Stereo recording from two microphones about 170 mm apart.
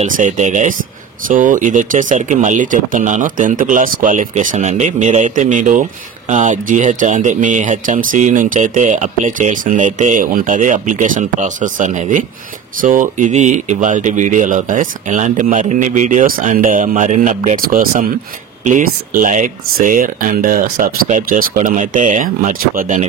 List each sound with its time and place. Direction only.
0.0 s speech: 45° right (ahead or behind)
17.6 s speech: 55° right (ahead or behind)